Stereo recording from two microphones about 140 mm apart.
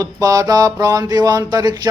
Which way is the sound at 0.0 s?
25° right (ahead or behind).